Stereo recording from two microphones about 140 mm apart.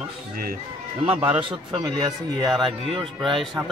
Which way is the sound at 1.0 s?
40° right (ahead or behind).